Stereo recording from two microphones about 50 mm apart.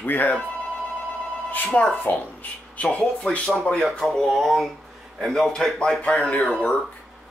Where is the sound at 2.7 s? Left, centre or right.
Left.